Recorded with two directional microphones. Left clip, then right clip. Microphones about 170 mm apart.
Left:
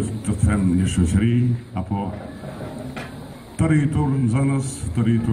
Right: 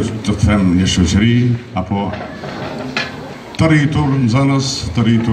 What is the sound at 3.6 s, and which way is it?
A man's voice, 20° right (ahead or behind).